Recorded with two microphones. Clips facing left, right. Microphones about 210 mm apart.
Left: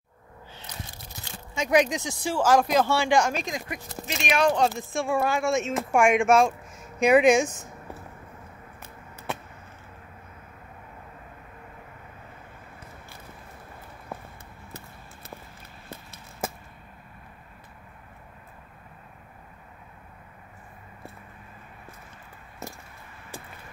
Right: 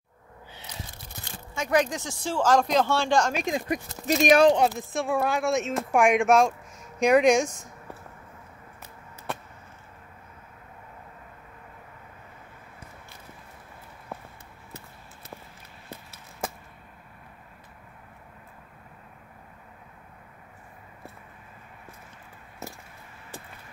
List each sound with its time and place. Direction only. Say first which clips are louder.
1.5 s speech: left 2 dB; 20° left (ahead or behind)
3.4 s speech: right 6 dB; 25° right (ahead or behind)
4.1 s speech: right 7 dB; 40° right (ahead or behind)
4.6 s speech: even; 5° right (ahead or behind)